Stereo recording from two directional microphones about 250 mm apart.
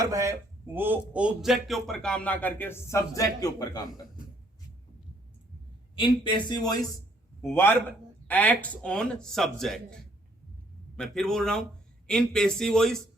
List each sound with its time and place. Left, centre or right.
0.0 s a man's voice: centre
6.0 s a man's voice: centre